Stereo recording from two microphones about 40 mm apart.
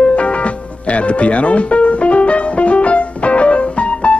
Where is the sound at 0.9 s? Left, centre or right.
Left.